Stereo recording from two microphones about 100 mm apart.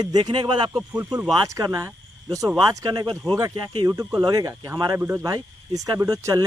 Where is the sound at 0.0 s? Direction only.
45° right (ahead or behind).